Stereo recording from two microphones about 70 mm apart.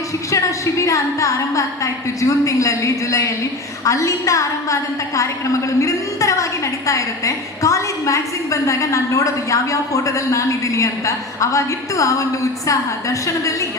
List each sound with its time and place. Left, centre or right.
0.3 s a woman's voice: left